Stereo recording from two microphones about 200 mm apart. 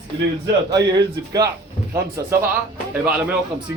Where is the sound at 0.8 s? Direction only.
20° right (ahead or behind).